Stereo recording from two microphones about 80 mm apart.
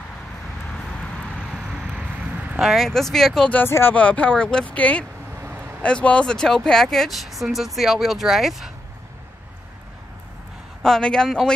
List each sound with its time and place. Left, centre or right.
0.7 s vehicle: centre
2.6 s speech: centre
3.6 s speech: left
3.9 s speech: centre
10.8 s speech: centre